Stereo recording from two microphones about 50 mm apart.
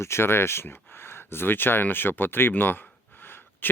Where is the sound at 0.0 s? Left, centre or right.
Left.